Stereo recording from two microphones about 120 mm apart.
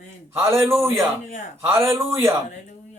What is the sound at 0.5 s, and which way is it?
Music, 20° right (ahead or behind).